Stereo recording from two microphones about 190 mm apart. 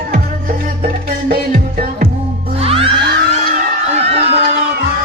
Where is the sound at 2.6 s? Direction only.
30° right (ahead or behind).